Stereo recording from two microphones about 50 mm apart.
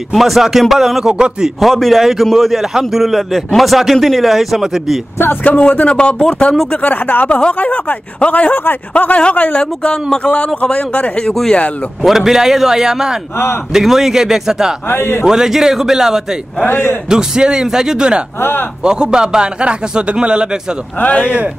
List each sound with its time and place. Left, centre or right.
0.1 s a man's voice: centre
1.1 s a man's voice: centre
1.6 s a man's voice: centre
5.4 s speech: left
7.2 s speech: left
12.0 s a man's voice: centre
14.9 s a man's voice: left
15.2 s a man's voice: centre
16.6 s a man's voice: left
17.1 s a man's voice: centre